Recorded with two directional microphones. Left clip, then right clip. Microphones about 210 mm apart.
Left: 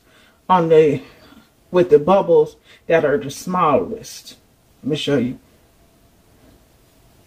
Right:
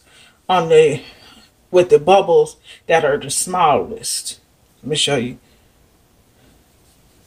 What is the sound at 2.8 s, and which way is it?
Speech, 20° right (ahead or behind).